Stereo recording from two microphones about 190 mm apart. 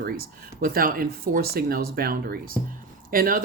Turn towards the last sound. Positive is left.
turn(degrees=-50)  # may be behind; listen again after turning